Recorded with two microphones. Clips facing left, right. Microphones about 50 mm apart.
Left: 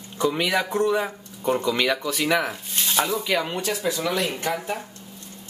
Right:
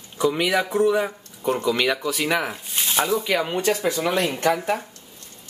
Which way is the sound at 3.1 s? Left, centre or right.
Centre.